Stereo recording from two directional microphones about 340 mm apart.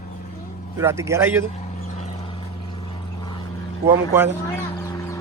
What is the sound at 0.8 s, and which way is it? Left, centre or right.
Speech, centre.